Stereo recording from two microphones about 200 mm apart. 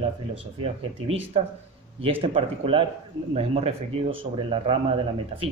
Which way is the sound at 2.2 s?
25° right (ahead or behind).